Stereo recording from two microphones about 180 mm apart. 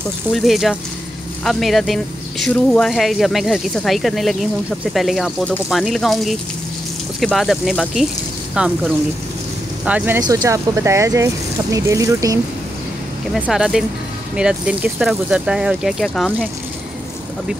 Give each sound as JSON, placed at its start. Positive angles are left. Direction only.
{"t": 0.3, "sound": "speech", "side_deg": 0}
{"t": 13.3, "sound": "speech", "side_deg": -5}